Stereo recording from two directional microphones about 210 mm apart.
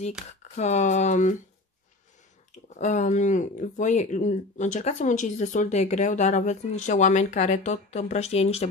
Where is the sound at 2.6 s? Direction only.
35° left (ahead or behind).